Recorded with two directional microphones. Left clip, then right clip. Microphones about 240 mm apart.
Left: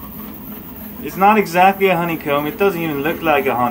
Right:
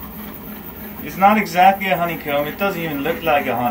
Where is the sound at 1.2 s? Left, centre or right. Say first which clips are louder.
Left 1 dB; centre.